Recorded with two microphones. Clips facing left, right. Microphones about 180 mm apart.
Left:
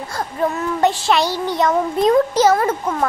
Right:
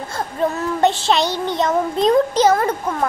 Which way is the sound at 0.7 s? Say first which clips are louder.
Even; 25° right (ahead or behind).